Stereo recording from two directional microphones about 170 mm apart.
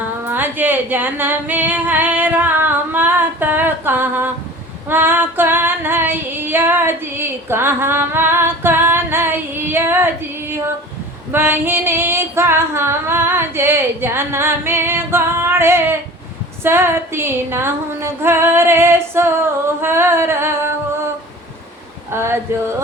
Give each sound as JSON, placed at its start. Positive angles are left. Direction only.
{"t": 0.3, "sound": "singing", "side_deg": -10}
{"t": 4.9, "sound": "female singing", "side_deg": -10}
{"t": 11.3, "sound": "female singing", "side_deg": -10}
{"t": 19.8, "sound": "singing", "side_deg": -15}
{"t": 22.1, "sound": "female singing", "side_deg": -15}